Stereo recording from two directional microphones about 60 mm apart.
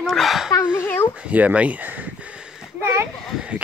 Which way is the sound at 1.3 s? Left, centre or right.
Right.